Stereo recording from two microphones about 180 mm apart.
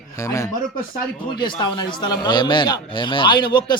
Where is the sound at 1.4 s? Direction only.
25° left (ahead or behind).